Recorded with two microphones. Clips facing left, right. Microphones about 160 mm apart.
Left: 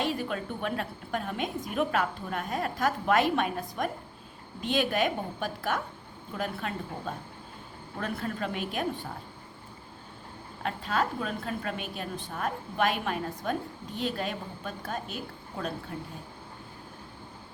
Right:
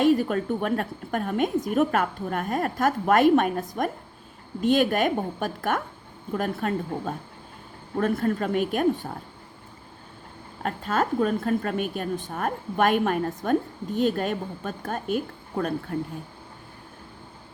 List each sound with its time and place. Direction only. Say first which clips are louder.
0.0 s a woman's voice: right 10 dB; 45° right (ahead or behind)
10.6 s a woman's voice: right 4 dB; 45° right (ahead or behind)